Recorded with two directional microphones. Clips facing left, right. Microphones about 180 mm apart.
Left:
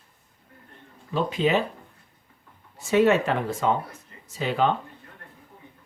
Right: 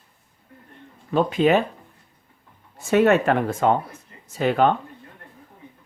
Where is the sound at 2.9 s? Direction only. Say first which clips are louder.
Right 3 dB; 55° right (ahead or behind).